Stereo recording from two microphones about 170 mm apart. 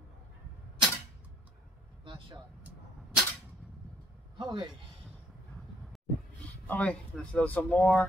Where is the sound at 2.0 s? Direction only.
30° right (ahead or behind).